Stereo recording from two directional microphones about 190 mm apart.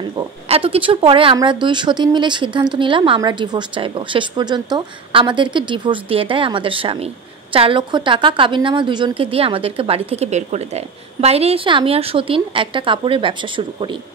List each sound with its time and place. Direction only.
0.5 s a woman's voice: 30° right (ahead or behind)